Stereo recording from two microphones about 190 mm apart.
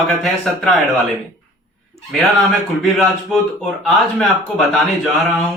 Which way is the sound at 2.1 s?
Centre (ahead or behind).